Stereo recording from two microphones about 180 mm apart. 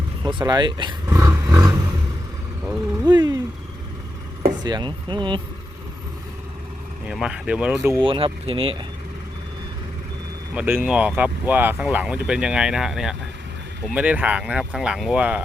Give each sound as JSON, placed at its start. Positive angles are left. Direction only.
{"t": 0.2, "sound": "speech", "side_deg": -25}
{"t": 1.2, "sound": "a sound", "side_deg": -15}
{"t": 3.1, "sound": "vehicle", "side_deg": -25}
{"t": 4.6, "sound": "speech", "side_deg": -25}
{"t": 7.1, "sound": "speech", "side_deg": -5}
{"t": 7.9, "sound": "speech", "side_deg": -30}
{"t": 10.5, "sound": "speech", "side_deg": -10}